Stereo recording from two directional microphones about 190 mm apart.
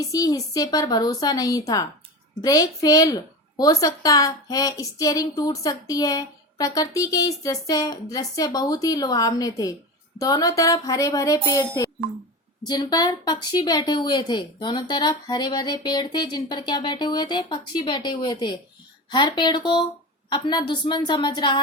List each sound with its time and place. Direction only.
0.0 s speech: 20° left (ahead or behind)